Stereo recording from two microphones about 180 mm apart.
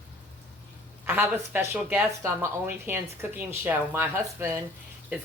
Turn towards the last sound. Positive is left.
turn(degrees=-10)  # may be behind; listen again after turning